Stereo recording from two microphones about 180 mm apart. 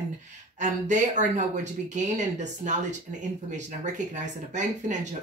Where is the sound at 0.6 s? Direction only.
40° right (ahead or behind).